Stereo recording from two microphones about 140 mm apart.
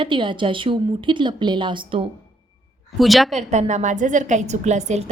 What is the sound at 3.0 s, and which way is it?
Speech, centre (ahead or behind).